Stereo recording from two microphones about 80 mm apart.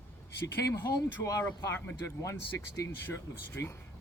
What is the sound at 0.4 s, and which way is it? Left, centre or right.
A man's voice, left.